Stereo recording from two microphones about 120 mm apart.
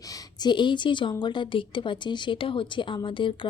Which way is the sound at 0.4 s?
40° left (ahead or behind).